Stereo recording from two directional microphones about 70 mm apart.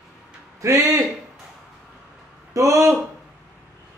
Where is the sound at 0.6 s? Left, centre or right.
Right.